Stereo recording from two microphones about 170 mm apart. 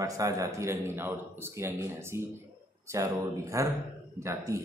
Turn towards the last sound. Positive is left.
turn(degrees=-15)  # may be behind; listen again after turning